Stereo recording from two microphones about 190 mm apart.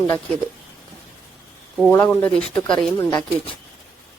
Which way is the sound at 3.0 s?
20° left (ahead or behind).